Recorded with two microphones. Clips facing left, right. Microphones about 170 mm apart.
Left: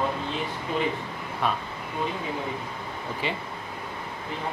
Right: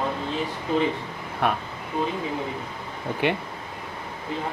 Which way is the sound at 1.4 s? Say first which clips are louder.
Right 3 dB; 60° right (ahead or behind).